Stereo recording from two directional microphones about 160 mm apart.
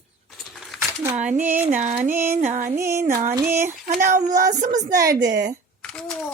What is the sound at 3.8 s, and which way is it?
Speech, 55° right (ahead or behind).